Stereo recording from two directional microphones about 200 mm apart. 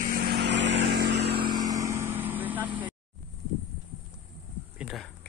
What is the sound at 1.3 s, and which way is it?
Vehicle, 20° right (ahead or behind).